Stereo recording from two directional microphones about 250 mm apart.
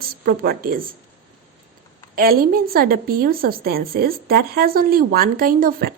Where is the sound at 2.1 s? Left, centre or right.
Right.